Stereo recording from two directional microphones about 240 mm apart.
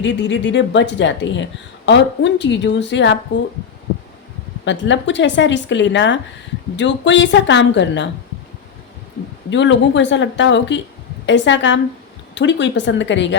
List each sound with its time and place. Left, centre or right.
0.0 s speech: left
4.6 s speech: left
9.5 s speech: left